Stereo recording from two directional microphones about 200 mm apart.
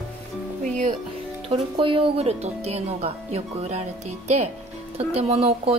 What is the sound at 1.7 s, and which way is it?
Speech, 25° right (ahead or behind).